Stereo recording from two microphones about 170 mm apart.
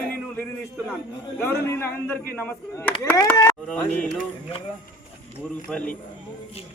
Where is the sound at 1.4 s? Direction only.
15° left (ahead or behind).